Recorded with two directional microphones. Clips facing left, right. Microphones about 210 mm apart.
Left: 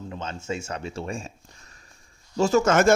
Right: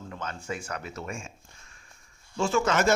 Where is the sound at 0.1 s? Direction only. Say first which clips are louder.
Left 3 dB; 25° left (ahead or behind).